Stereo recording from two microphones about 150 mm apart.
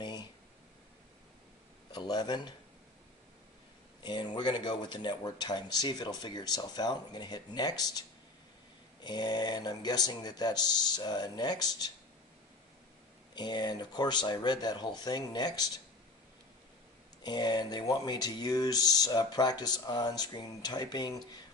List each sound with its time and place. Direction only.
0.0 s a sound: 30° left (ahead or behind)
1.9 s speech: 30° left (ahead or behind)
4.0 s speech: 30° left (ahead or behind)
9.0 s speech: 30° left (ahead or behind)
13.3 s speech: 30° left (ahead or behind)
17.2 s speech: 30° left (ahead or behind)